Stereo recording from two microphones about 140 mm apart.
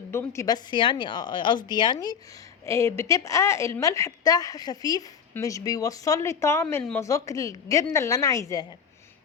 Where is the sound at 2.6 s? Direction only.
20° left (ahead or behind).